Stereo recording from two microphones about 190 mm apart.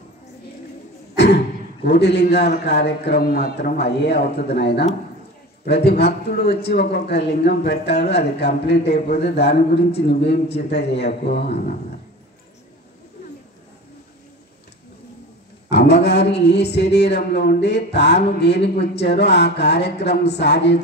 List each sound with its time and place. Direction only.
1.1 s a sound: 60° left (ahead or behind)
1.9 s speech: 60° left (ahead or behind)
15.7 s speech: 60° left (ahead or behind)